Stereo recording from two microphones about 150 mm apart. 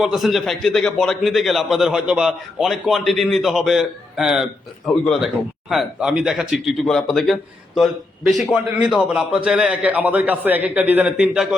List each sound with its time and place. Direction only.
0.0 s a man's voice: centre (ahead or behind)